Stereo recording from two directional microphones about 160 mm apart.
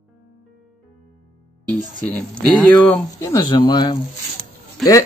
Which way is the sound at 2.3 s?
10° left (ahead or behind).